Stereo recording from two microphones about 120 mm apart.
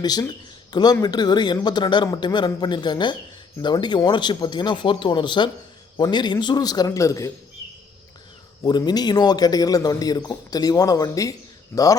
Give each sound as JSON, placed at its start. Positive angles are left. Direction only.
{"t": 0.0, "sound": "a man's voice", "side_deg": 35}
{"t": 8.6, "sound": "a man's voice", "side_deg": 35}